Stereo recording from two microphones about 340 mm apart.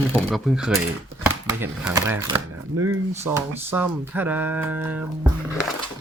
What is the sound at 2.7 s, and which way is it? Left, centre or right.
Speech, right.